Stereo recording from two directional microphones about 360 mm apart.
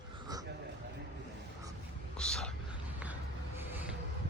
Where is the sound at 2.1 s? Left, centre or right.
Centre.